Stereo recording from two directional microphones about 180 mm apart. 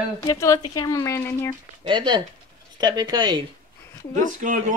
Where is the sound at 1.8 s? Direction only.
25° right (ahead or behind).